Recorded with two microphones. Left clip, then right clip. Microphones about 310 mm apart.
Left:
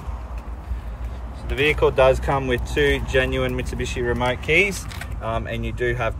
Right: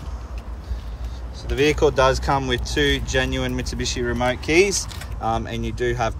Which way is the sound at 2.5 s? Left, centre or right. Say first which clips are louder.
Left 1 dB; right.